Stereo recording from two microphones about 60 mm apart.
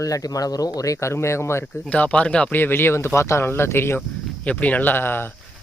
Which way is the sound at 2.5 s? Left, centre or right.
Left.